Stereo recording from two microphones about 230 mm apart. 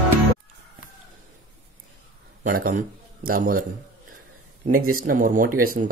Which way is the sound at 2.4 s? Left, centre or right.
Right.